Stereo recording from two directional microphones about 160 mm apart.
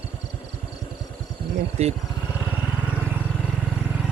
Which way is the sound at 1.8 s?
45° right (ahead or behind).